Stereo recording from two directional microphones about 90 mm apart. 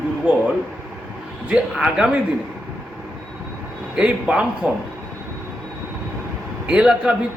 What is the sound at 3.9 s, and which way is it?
Speech, 10° right (ahead or behind).